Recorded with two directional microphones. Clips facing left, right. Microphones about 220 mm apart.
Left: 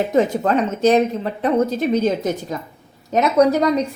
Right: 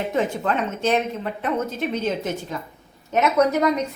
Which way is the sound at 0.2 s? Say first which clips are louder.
Left 6 dB; 40° left (ahead or behind).